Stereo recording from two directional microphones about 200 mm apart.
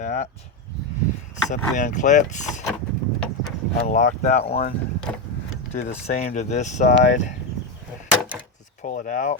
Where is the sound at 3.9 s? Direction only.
40° left (ahead or behind).